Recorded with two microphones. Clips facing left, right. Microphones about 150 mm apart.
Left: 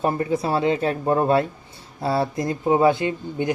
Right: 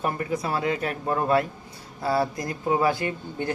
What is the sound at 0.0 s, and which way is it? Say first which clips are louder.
Speech: left 5 dB; 30° left (ahead or behind).